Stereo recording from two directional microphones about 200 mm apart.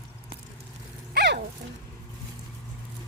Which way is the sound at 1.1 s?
60° right (ahead or behind).